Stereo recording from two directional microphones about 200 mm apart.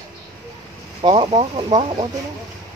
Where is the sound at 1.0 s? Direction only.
25° right (ahead or behind).